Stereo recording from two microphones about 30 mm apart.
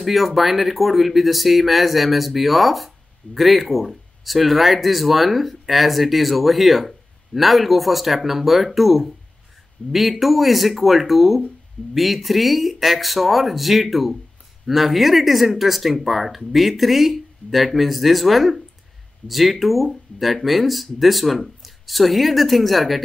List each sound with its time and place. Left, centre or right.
0.0 s speech: centre
9.8 s speech: left
10.2 s speech: centre